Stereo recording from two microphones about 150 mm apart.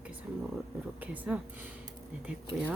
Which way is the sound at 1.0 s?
10° right (ahead or behind).